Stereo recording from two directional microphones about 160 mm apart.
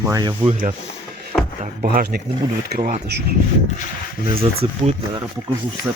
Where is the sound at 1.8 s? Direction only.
85° right.